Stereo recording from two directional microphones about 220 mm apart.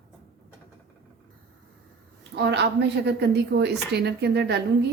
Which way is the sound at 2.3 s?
50° right (ahead or behind).